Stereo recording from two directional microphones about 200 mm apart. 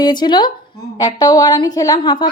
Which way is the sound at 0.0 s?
20° left (ahead or behind).